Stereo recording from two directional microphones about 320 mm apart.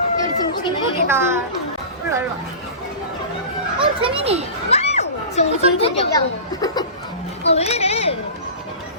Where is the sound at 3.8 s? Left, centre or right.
Centre.